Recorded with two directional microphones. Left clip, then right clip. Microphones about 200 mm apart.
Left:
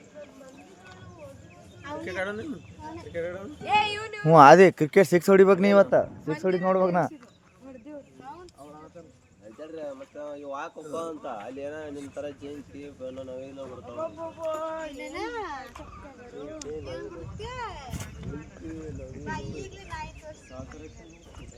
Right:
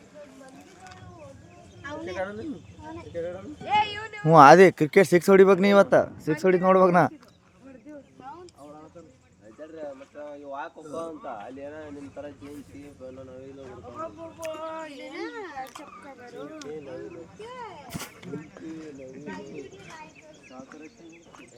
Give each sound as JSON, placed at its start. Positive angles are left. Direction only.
{"t": 1.8, "sound": "a sound", "side_deg": -20}
{"t": 3.1, "sound": "speech", "side_deg": 35}
{"t": 3.6, "sound": "speech", "side_deg": 65}
{"t": 4.3, "sound": "speech", "side_deg": 0}
{"t": 9.6, "sound": "a sound", "side_deg": 65}
{"t": 10.9, "sound": "speech", "side_deg": 65}
{"t": 14.6, "sound": "speech", "side_deg": -45}
{"t": 15.1, "sound": "speech", "side_deg": 40}
{"t": 17.4, "sound": "speech", "side_deg": 25}